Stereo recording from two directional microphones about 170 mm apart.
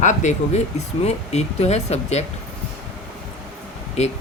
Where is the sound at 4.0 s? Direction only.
40° left (ahead or behind).